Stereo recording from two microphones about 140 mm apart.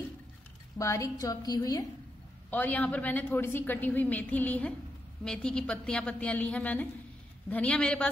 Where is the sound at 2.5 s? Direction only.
10° left (ahead or behind).